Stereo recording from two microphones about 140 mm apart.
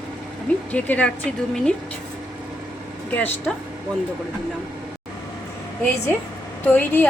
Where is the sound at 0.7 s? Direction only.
10° left (ahead or behind).